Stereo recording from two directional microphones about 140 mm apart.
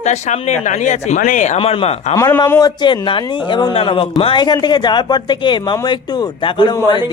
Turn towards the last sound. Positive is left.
turn(degrees=30)  # may be behind; listen again after turning